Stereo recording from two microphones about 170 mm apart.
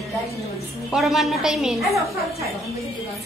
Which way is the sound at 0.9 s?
Centre (ahead or behind).